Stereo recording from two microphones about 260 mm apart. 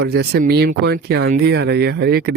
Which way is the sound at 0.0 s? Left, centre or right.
Right.